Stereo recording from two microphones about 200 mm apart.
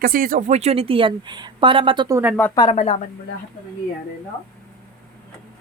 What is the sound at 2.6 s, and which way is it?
Speech, 30° left (ahead or behind).